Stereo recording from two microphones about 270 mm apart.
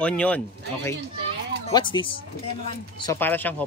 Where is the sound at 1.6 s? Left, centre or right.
Centre.